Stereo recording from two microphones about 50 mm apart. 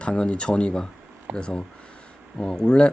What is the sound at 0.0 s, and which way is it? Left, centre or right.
Speech, left.